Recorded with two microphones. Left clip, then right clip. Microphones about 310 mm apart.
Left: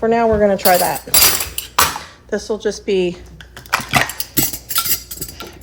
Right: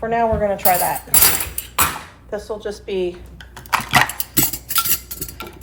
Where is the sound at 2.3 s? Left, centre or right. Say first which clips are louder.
Left 6 dB; left.